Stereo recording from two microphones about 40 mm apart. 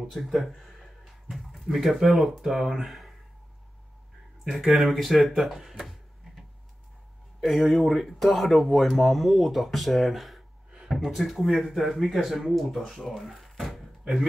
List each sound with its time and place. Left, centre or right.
0.2 s speech: centre
4.5 s speech: centre
10.7 s a sound: centre
11.0 s speech: centre